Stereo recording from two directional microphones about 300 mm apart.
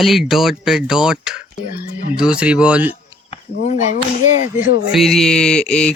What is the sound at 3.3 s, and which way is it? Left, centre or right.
Speech, left.